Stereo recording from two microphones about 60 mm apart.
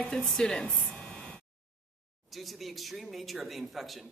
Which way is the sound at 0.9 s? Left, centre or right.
Centre.